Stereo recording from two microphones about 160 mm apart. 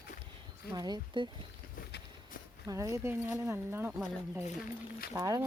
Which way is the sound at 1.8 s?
85° left.